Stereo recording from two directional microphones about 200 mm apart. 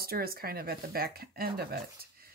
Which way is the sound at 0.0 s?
50° right (ahead or behind).